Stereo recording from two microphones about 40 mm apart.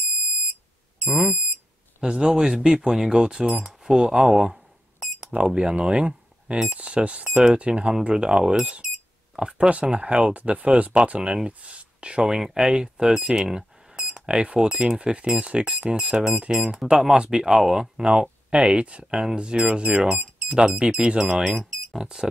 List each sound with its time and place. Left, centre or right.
1.0 s speech: centre; by 7.2 s right
7.2 s speech: centre
7.5 s speech: right
9.7 s speech: right